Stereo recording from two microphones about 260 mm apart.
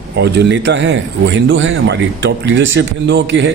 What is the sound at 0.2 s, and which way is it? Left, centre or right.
A man's voice, right.